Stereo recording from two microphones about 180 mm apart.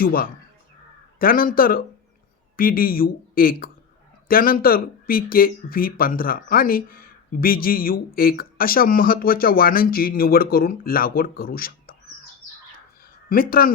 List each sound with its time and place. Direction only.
0.0 s speech: 55° left (ahead or behind)
13.3 s speech: 55° left (ahead or behind)